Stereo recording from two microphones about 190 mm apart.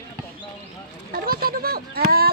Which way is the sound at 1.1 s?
50° right (ahead or behind).